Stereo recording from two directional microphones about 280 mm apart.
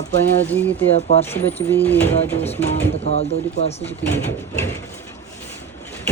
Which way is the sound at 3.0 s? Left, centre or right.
Left.